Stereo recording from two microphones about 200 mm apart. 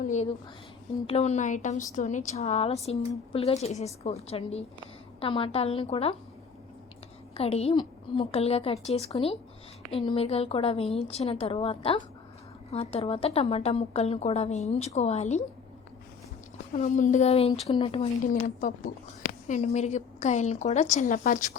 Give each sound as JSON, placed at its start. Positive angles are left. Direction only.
{"t": 0.0, "sound": "a sound", "side_deg": 35}
{"t": 1.0, "sound": "a woman's voice", "side_deg": 30}
{"t": 7.3, "sound": "a woman's voice", "side_deg": 30}
{"t": 16.7, "sound": "a woman's voice", "side_deg": 40}
{"t": 18.2, "sound": "a woman's voice", "side_deg": 40}